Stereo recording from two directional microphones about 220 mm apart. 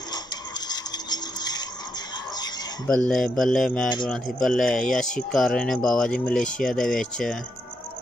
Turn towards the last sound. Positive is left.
turn(degrees=0)  # may be behind; listen again after turning